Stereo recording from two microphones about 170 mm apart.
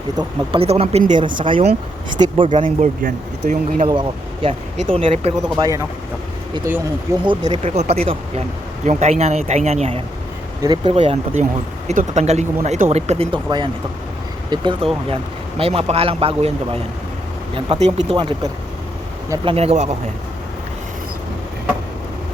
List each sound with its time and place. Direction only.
0.2 s speech: 35° right (ahead or behind)
3.0 s speech: 50° right (ahead or behind)
4.4 s speech: 30° right (ahead or behind)
5.5 s speech: 20° right (ahead or behind)
6.7 s speech: 10° right (ahead or behind)
7.3 s speech: 25° right (ahead or behind)
7.7 s speech: 40° right (ahead or behind)